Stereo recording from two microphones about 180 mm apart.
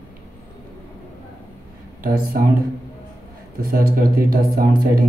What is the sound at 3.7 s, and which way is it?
Speech, 55° right (ahead or behind).